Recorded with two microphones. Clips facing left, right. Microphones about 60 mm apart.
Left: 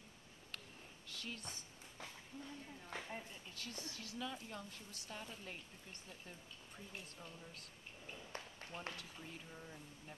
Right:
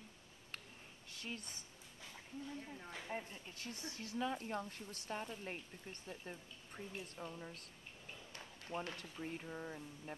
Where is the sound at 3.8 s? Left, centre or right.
Right.